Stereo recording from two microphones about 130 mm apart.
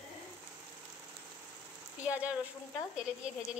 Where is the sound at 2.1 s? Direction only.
10° right (ahead or behind).